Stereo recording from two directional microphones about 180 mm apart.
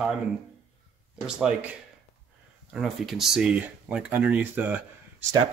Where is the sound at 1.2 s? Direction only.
5° right (ahead or behind).